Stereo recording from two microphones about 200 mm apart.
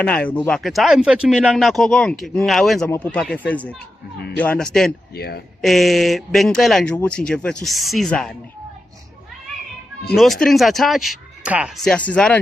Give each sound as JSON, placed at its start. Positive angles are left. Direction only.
{"t": 0.0, "sound": "speech", "side_deg": 5}
{"t": 5.1, "sound": "a man's voice", "side_deg": 50}
{"t": 5.6, "sound": "speech", "side_deg": 0}
{"t": 10.2, "sound": "speech", "side_deg": 0}